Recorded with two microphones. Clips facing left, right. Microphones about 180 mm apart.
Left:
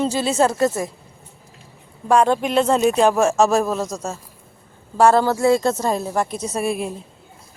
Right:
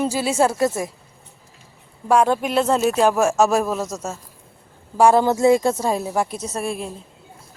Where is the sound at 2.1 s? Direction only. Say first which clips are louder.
Left 1 dB; 10° right (ahead or behind).